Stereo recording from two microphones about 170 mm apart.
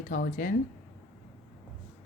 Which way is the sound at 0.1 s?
55° left (ahead or behind).